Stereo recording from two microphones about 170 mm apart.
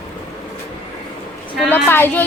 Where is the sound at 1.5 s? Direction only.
10° left (ahead or behind).